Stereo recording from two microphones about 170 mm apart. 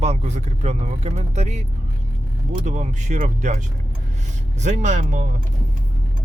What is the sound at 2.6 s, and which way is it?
Speech, 45° right (ahead or behind).